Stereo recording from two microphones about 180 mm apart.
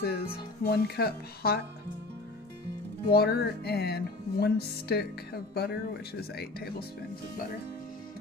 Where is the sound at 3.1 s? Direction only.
60° left (ahead or behind).